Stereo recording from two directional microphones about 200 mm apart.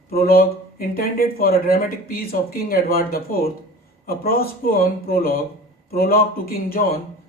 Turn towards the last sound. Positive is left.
turn(degrees=50)  # may be behind; listen again after turning